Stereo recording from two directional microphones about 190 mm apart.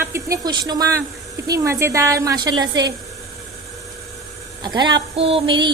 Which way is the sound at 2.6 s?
20° right (ahead or behind).